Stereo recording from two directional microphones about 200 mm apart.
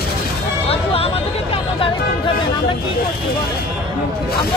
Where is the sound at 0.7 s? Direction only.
30° left (ahead or behind).